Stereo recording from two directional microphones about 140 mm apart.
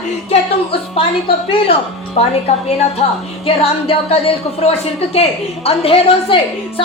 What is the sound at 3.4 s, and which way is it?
Music, 45° left (ahead or behind).